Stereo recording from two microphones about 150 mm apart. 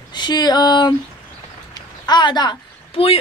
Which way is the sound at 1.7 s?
30° left (ahead or behind).